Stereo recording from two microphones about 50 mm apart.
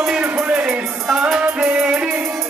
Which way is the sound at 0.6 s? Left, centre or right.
Centre.